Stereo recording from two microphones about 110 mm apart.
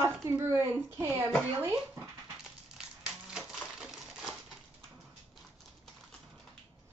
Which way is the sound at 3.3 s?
Centre (ahead or behind).